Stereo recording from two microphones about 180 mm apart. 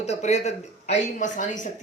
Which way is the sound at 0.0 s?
40° left (ahead or behind).